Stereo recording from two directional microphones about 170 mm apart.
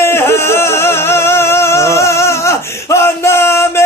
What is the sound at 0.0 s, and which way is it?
Music, 15° left (ahead or behind).